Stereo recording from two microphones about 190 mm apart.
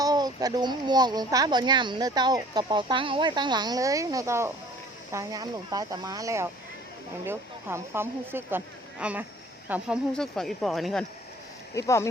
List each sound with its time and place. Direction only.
0.0 s speech: 20° right (ahead or behind)
10.2 s speech: centre (ahead or behind)
11.7 s speech: 15° left (ahead or behind)